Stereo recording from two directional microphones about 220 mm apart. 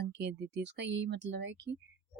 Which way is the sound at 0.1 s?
50° right (ahead or behind).